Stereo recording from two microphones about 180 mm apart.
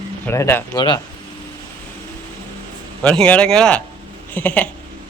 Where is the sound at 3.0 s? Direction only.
5° left (ahead or behind).